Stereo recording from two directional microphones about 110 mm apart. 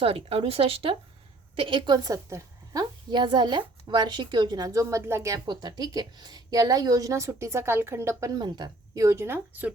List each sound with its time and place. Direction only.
0.0 s a woman's voice: 60° right (ahead or behind); by 5.4 s 25° right (ahead or behind)
5.5 s a woman's voice: 40° right (ahead or behind)
9.0 s a woman's voice: 25° right (ahead or behind)